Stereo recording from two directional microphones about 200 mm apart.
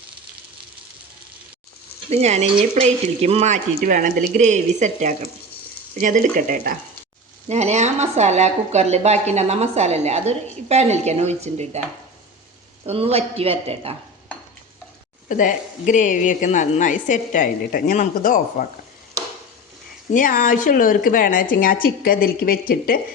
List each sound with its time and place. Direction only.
2.0 s speech: 35° right (ahead or behind)
12.8 s speech: 30° right (ahead or behind)
15.3 s a woman's voice: 40° left (ahead or behind)
20.1 s a woman's voice: 45° left (ahead or behind)